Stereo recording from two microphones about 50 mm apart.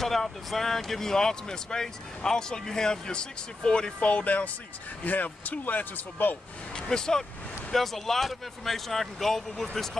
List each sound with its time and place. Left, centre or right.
0.0 s speech: centre; by 6.3 s left
6.7 s speech: centre